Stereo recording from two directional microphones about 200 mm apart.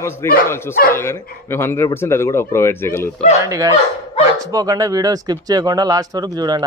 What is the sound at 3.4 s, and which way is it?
Speech, 15° right (ahead or behind).